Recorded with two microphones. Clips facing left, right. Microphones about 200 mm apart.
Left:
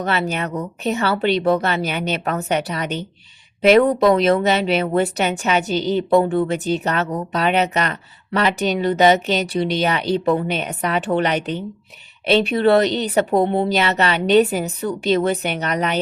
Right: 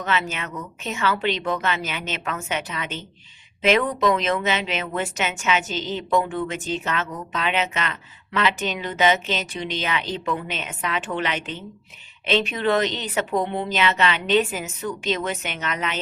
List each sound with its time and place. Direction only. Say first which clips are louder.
0.0 s speech: left 5 dB; 35° left (ahead or behind)